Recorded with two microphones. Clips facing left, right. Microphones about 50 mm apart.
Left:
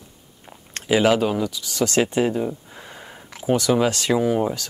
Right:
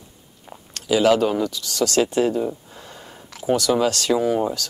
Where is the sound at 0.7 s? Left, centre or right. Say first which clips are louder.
Even; left.